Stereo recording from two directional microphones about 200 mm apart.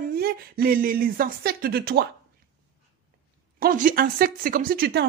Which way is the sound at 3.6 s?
45° right (ahead or behind).